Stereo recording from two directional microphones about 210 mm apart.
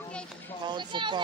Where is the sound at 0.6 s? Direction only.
20° right (ahead or behind).